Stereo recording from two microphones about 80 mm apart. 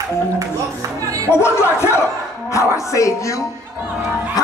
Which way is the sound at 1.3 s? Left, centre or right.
Left.